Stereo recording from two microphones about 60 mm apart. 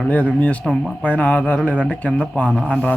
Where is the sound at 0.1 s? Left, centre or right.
Left.